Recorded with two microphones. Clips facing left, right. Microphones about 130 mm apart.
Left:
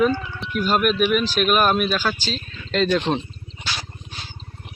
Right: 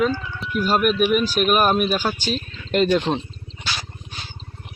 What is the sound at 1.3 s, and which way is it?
Speech, 40° right (ahead or behind).